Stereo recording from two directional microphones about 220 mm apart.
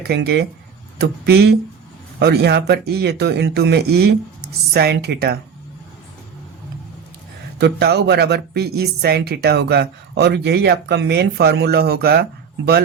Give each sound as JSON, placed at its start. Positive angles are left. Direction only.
{"t": 0.1, "sound": "speech", "side_deg": -50}
{"t": 7.6, "sound": "speech", "side_deg": -50}